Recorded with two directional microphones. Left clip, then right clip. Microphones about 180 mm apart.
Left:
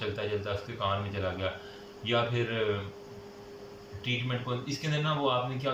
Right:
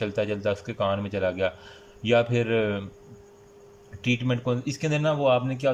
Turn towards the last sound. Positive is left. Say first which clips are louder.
# right 7 dB
turn(degrees=-50)  # may be behind; listen again after turning